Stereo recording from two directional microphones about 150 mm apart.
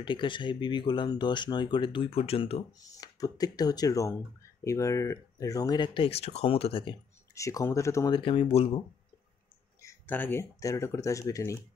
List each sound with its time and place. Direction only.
0.0 s speech: 30° left (ahead or behind)
2.8 s speech: 25° left (ahead or behind)
7.3 s speech: 20° left (ahead or behind)
8.1 s speech: 35° left (ahead or behind)
9.8 s speech: 15° left (ahead or behind)